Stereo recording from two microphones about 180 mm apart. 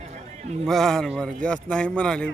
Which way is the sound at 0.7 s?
5° left (ahead or behind).